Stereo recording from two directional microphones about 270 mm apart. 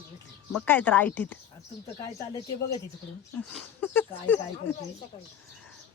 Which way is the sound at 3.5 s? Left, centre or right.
Centre.